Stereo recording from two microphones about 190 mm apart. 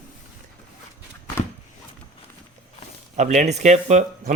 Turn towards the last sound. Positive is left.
turn(degrees=-40)  # may be behind; listen again after turning